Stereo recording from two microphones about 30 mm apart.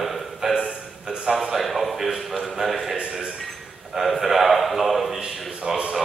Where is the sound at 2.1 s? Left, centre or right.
Centre.